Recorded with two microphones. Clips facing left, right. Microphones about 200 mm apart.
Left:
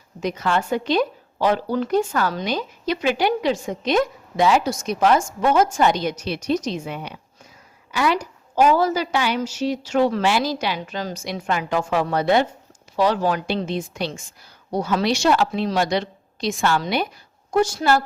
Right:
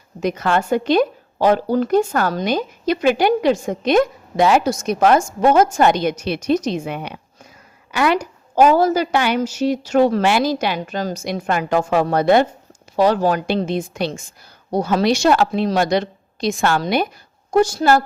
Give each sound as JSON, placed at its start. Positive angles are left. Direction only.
{"t": 0.2, "sound": "a woman's voice", "side_deg": -55}
{"t": 5.7, "sound": "a woman's voice", "side_deg": -55}
{"t": 14.7, "sound": "a woman's voice", "side_deg": -40}
{"t": 17.5, "sound": "speech", "side_deg": -35}